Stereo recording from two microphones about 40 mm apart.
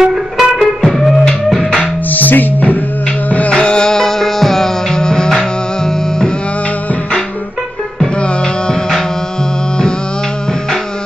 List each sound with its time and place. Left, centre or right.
0.0 s music: centre
0.6 s music: centre
1.5 s music: centre
2.0 s music: left
3.3 s music: left; by 6.3 s centre